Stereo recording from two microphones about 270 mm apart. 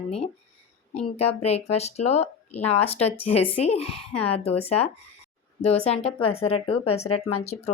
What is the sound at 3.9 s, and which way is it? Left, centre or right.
Speech, left.